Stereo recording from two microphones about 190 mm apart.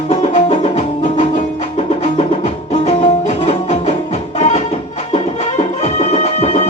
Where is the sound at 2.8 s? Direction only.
35° left (ahead or behind).